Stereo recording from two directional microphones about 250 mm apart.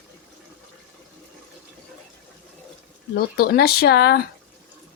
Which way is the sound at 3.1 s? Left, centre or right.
Left.